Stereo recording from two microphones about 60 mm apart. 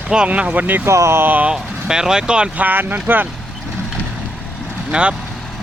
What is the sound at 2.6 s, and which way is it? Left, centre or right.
Speech, right.